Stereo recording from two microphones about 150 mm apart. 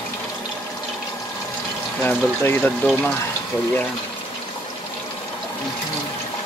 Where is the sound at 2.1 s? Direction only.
15° left (ahead or behind).